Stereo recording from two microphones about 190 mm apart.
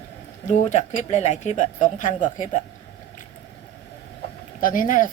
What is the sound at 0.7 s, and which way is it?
Speech, 40° left (ahead or behind).